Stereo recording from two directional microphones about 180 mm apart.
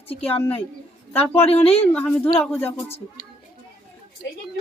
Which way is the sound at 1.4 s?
35° left (ahead or behind).